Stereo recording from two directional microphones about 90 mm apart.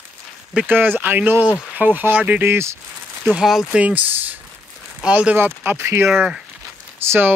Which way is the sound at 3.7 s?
15° right (ahead or behind).